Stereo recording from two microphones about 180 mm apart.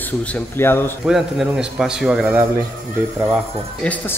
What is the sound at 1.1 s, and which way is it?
A man's voice, centre (ahead or behind).